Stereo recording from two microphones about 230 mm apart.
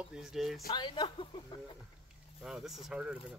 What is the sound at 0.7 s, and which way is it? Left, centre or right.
Speech, centre.